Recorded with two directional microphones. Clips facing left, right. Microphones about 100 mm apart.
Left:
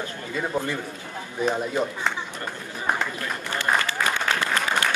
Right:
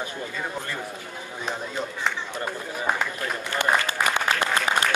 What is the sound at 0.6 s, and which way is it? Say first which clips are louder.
A man's voice: left 4 dB; 15° left (ahead or behind).